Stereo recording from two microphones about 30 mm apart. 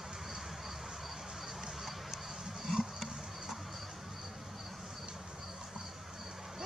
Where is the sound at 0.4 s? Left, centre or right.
Centre.